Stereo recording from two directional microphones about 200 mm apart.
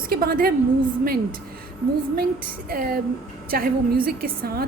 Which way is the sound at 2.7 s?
45° right (ahead or behind).